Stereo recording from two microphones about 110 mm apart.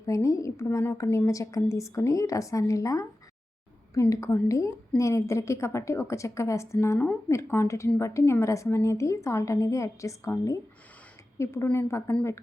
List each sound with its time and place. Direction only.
0.0 s a woman's voice: 30° left (ahead or behind)
4.1 s a woman's voice: 30° left (ahead or behind)